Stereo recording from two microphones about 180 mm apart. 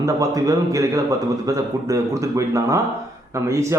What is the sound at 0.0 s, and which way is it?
A man's voice, 20° right (ahead or behind).